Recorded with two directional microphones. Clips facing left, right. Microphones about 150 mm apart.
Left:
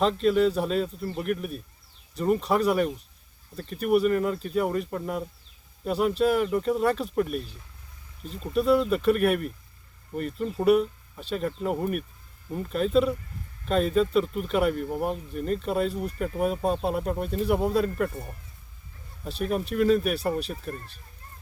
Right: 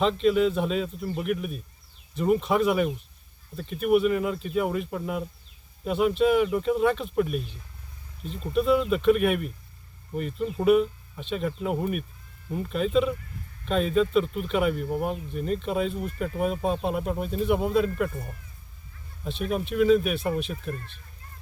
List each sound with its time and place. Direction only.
0.0 s speech: centre (ahead or behind)
19.4 s speech: centre (ahead or behind)
20.7 s speech: 40° left (ahead or behind)